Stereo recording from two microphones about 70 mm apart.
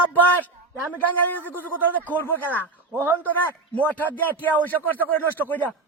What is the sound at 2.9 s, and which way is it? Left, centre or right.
Speech, right.